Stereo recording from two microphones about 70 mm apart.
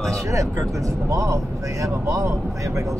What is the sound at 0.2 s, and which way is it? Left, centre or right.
Speech, right.